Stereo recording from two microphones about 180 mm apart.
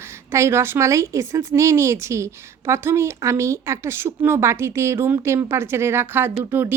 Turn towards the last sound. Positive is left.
turn(degrees=-10)  # may be behind; listen again after turning